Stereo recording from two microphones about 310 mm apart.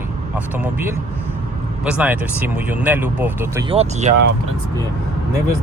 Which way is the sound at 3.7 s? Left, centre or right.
Centre.